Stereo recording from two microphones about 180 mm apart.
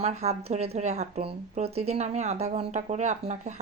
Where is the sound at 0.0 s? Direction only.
35° right (ahead or behind).